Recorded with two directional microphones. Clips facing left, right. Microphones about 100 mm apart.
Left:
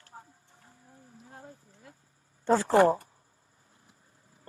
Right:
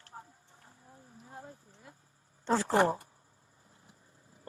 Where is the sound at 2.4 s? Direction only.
15° left (ahead or behind).